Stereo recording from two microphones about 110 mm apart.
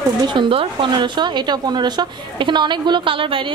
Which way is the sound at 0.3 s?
50° right (ahead or behind).